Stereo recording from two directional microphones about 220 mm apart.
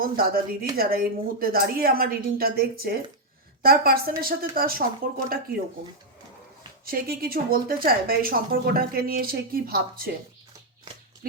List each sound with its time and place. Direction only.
0.0 s a woman's voice: 40° right (ahead or behind)
6.8 s a woman's voice: 40° right (ahead or behind)